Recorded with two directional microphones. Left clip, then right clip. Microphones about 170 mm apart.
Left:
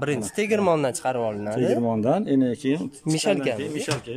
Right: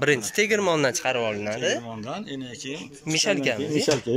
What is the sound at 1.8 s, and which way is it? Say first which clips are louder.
Speech: left 11 dB; 85° left.